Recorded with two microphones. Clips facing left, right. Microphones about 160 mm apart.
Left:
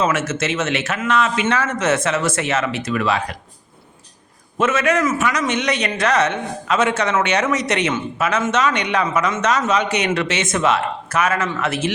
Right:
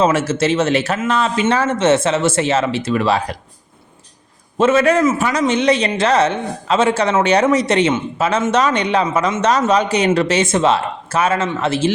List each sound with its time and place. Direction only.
0.0 s speech: 30° right (ahead or behind)
4.5 s speech: 30° right (ahead or behind)